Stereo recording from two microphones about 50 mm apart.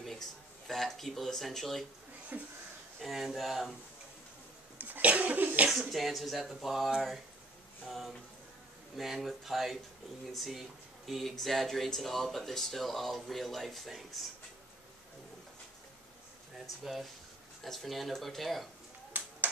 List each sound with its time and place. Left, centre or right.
0.0 s speech: centre
2.3 s speech: right
3.0 s speech: centre
4.7 s cough: right
5.7 s speech: centre
8.9 s speech: centre
16.8 s speech: centre
19.1 s a sound: right